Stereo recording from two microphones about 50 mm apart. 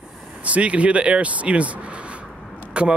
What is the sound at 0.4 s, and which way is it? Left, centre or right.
Speech, right.